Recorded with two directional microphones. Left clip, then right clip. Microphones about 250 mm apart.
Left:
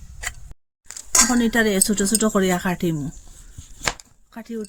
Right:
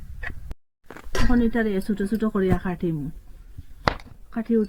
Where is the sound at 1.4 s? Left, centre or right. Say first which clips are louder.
Left 4 dB; left.